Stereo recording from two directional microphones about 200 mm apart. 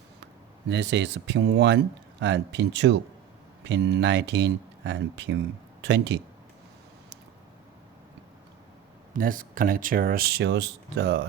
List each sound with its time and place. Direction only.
0.7 s speech: 60° right (ahead or behind)
9.1 s speech: 45° right (ahead or behind)